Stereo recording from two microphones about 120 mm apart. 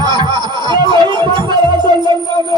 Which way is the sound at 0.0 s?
35° right (ahead or behind).